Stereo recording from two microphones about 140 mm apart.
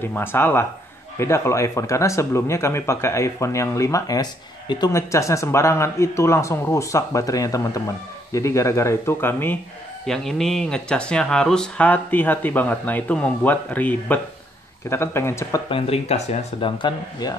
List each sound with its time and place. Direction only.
0.0 s speech: 15° left (ahead or behind)
10.0 s speech: 5° left (ahead or behind); by 15.6 s 20° left (ahead or behind)
15.7 s speech: 45° left (ahead or behind); by 17.4 s 30° left (ahead or behind)